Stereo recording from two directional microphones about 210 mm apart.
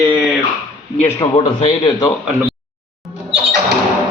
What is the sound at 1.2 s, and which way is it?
Speech, 25° left (ahead or behind).